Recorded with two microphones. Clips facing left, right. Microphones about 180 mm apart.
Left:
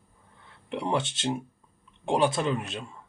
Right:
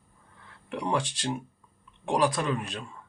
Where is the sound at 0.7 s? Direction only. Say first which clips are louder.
Left 1 dB; 25° left (ahead or behind).